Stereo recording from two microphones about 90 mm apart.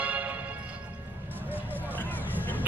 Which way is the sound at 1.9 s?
20° left (ahead or behind).